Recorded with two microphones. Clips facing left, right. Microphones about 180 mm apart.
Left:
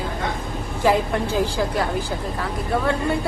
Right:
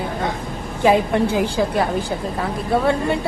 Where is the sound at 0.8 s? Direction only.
20° right (ahead or behind).